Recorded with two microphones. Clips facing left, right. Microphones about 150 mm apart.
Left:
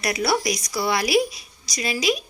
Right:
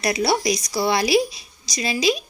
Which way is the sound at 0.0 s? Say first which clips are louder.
Right 2 dB; 25° right (ahead or behind).